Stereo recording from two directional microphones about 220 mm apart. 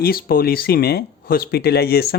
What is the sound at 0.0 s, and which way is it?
A man's voice, 45° left (ahead or behind).